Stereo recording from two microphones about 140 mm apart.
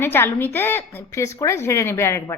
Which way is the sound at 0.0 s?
15° left (ahead or behind).